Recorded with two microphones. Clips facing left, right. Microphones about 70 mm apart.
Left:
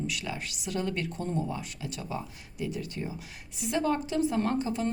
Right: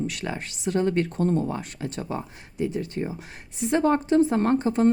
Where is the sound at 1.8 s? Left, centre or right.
Right.